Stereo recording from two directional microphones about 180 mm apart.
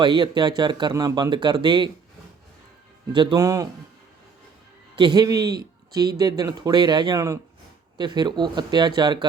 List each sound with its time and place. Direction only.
0.0 s speech: 25° right (ahead or behind)
3.1 s speech: 25° right (ahead or behind)
4.9 s a man's voice: 25° right (ahead or behind)